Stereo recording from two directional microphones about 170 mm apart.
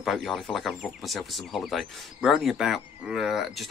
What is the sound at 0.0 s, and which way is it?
Speech, centre (ahead or behind).